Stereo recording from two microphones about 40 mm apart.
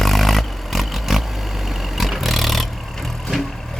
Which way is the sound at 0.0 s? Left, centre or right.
Centre.